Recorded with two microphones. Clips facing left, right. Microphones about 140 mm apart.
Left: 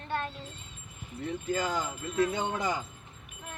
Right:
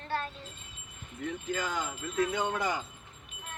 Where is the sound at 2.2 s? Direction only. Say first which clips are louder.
Left 1 dB; 25° left (ahead or behind).